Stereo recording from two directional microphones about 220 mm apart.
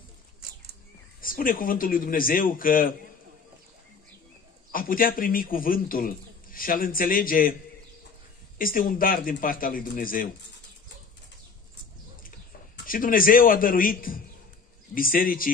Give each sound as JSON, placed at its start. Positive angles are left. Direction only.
{"t": 1.2, "sound": "a man's voice", "side_deg": 40}
{"t": 4.7, "sound": "a man's voice", "side_deg": 40}
{"t": 8.5, "sound": "a man's voice", "side_deg": 40}
{"t": 12.8, "sound": "a man's voice", "side_deg": 40}